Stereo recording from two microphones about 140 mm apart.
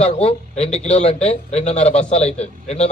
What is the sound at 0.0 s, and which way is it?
A man's voice, 50° left (ahead or behind).